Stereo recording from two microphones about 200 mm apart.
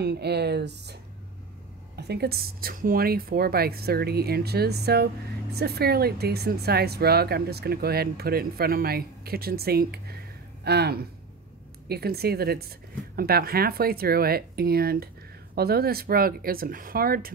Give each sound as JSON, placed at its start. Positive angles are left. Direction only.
{"t": 0.0, "sound": "speech", "side_deg": -55}
{"t": 2.0, "sound": "speech", "side_deg": -55}